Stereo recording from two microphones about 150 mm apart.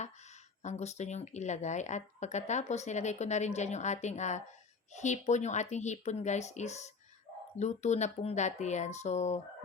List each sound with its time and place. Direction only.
0.6 s speech: 50° left (ahead or behind)